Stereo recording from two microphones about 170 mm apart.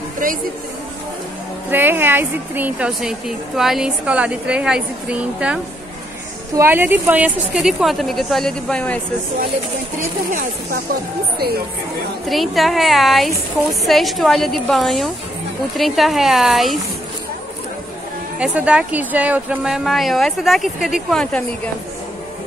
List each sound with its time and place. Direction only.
1.7 s a woman's voice: 10° right (ahead or behind); by 9.0 s 5° left (ahead or behind)
9.9 s speech: 50° right (ahead or behind)
11.3 s speech: 65° right (ahead or behind)
12.3 s a woman's voice: centre (ahead or behind)
18.4 s a woman's voice: 5° right (ahead or behind)